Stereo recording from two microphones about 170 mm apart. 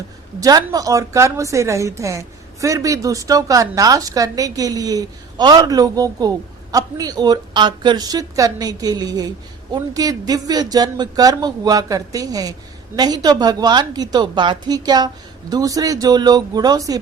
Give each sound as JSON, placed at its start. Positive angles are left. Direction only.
{"t": 0.3, "sound": "a woman's voice", "side_deg": -20}